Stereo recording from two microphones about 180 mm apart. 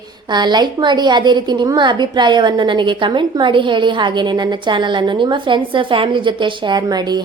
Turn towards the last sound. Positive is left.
turn(degrees=-20)  # may be behind; listen again after turning